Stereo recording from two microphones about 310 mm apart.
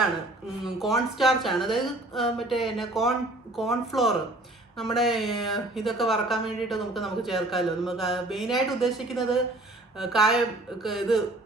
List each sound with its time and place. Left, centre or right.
0.6 s speech: centre